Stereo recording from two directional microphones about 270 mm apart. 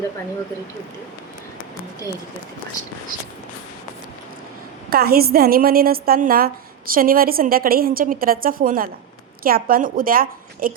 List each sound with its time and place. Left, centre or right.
4.9 s a woman's voice: right